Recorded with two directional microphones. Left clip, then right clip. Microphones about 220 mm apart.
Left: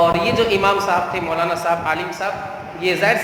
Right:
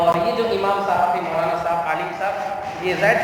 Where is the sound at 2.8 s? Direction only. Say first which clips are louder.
Left 1 dB; 55° left (ahead or behind).